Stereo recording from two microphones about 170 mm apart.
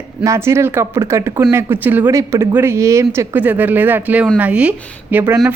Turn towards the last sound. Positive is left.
turn(degrees=-10)  # may be behind; listen again after turning